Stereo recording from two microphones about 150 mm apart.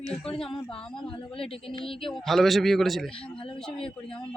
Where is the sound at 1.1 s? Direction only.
35° left (ahead or behind).